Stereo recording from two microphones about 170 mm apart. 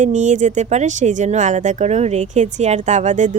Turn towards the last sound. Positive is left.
turn(degrees=-45)  # may be behind; listen again after turning